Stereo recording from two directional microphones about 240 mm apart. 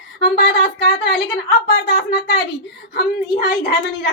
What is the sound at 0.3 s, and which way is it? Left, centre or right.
A man's voice, left.